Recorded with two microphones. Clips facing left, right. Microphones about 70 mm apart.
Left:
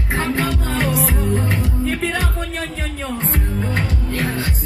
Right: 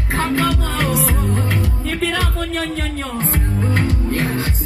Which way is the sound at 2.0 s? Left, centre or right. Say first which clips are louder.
Right 2 dB; right.